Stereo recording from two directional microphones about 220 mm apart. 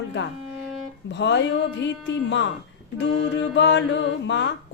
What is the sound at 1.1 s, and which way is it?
Music, 55° left (ahead or behind).